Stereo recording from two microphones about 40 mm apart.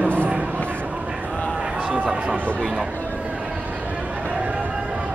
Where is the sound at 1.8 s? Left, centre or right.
Right.